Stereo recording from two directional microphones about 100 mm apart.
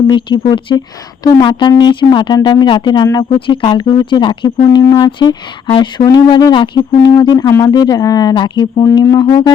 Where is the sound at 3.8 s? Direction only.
45° left (ahead or behind).